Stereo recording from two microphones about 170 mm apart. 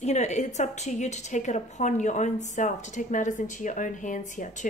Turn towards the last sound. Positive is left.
turn(degrees=45)  # may be behind; listen again after turning